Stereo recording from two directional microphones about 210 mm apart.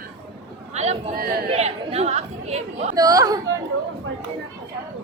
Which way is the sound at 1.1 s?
45° right (ahead or behind).